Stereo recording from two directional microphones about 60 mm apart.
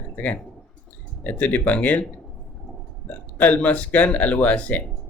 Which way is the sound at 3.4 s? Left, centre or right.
Left.